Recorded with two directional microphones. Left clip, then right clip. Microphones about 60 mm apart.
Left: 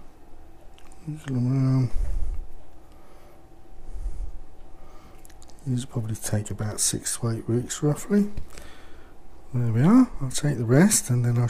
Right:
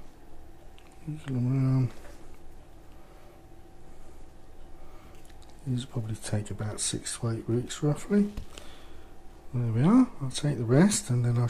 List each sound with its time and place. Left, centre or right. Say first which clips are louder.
1.1 s speech: left 4 dB; left
5.7 s speech: left 4 dB; left